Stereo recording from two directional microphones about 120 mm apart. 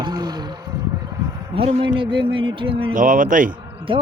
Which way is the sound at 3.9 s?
45° right (ahead or behind).